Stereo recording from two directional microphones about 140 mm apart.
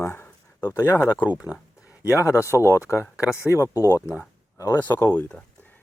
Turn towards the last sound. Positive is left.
turn(degrees=15)  # may be behind; listen again after turning